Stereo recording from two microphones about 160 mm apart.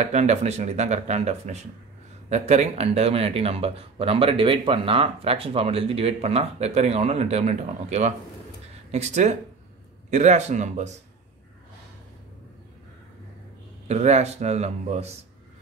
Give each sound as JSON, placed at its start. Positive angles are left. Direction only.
{"t": 0.0, "sound": "speech", "side_deg": -45}
{"t": 8.6, "sound": "a sound", "side_deg": -40}
{"t": 10.1, "sound": "speech", "side_deg": -45}
{"t": 13.8, "sound": "speech", "side_deg": -45}